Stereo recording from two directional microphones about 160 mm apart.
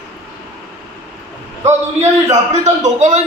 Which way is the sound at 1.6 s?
45° right (ahead or behind).